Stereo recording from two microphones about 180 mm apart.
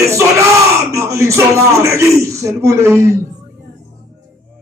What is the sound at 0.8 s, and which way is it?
A man's voice, 15° right (ahead or behind).